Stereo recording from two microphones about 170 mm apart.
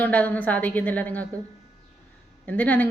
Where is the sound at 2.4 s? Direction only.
10° left (ahead or behind).